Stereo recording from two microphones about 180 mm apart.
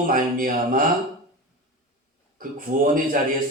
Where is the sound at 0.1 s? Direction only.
50° right (ahead or behind).